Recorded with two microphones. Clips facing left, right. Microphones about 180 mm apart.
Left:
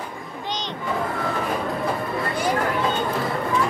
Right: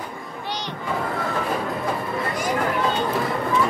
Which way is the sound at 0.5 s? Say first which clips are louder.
Left 1 dB; 20° left (ahead or behind).